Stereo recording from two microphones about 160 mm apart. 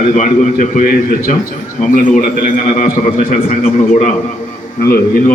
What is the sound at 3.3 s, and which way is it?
A man's voice, 50° left (ahead or behind).